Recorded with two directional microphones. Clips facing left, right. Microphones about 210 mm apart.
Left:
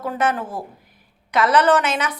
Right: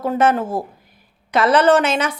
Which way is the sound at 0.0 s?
25° right (ahead or behind).